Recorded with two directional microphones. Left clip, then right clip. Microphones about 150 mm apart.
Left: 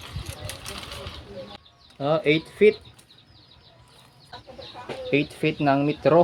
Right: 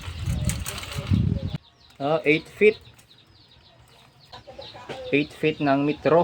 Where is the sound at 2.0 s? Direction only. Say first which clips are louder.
Even; 20° left (ahead or behind).